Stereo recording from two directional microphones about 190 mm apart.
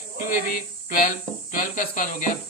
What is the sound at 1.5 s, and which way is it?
Speech, 45° left (ahead or behind).